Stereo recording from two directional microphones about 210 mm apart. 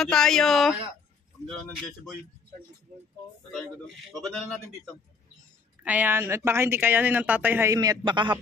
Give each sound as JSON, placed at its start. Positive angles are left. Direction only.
{"t": 0.0, "sound": "a man's voice", "side_deg": 5}
{"t": 3.5, "sound": "a man's voice", "side_deg": 0}
{"t": 5.9, "sound": "speech", "side_deg": -10}